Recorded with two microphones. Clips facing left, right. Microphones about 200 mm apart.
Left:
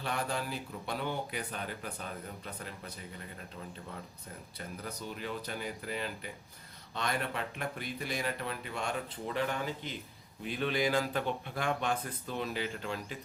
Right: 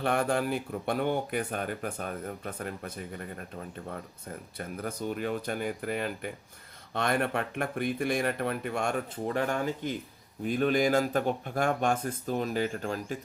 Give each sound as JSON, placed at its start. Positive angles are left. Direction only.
{"t": 0.0, "sound": "speech", "side_deg": -55}